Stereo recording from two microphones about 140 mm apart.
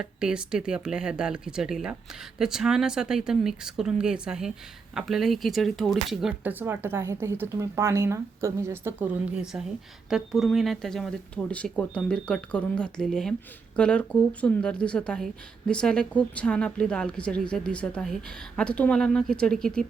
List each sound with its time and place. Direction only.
0.0 s speech: 5° right (ahead or behind)
6.4 s a woman's voice: 15° right (ahead or behind); by 19.8 s 5° left (ahead or behind)